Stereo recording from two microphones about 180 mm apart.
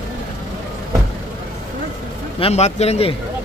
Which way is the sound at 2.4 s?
35° left (ahead or behind).